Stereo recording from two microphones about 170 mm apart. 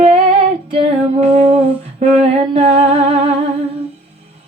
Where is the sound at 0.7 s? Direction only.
35° right (ahead or behind).